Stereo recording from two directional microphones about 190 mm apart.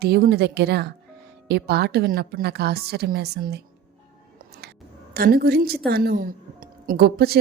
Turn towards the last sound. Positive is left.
turn(degrees=-55)  # may be behind; listen again after turning